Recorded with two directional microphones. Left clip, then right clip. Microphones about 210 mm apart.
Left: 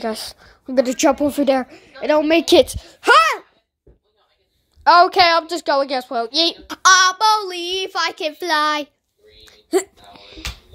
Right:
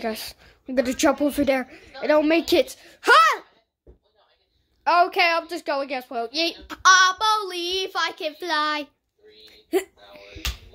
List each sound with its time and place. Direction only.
0.0 s a woman's voice: 15° left (ahead or behind)
4.8 s a woman's voice: 25° left (ahead or behind)
9.4 s music: 10° left (ahead or behind)